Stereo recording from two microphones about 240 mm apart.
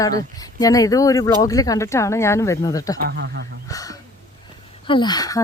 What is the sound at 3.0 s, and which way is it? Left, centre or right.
Speech, right.